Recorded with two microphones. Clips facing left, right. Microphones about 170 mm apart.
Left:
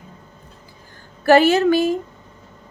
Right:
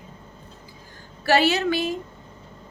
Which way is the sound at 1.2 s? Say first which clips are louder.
Left 7 dB; 50° left (ahead or behind).